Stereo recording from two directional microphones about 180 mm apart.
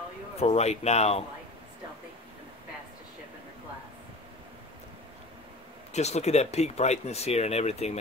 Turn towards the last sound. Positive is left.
turn(degrees=35)  # may be behind; listen again after turning